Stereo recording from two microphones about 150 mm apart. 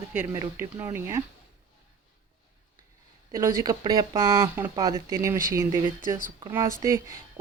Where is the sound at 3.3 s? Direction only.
20° right (ahead or behind).